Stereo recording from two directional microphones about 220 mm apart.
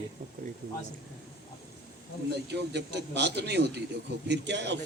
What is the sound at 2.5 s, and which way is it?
A man's voice, 50° right (ahead or behind).